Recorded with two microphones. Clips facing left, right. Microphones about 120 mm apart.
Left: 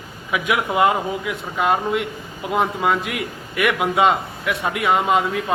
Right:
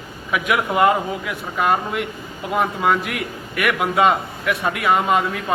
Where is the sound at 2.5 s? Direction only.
20° left (ahead or behind).